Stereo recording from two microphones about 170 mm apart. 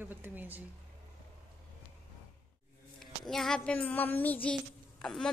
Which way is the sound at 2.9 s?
Centre (ahead or behind).